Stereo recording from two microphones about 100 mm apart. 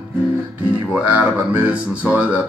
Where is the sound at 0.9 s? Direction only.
15° right (ahead or behind).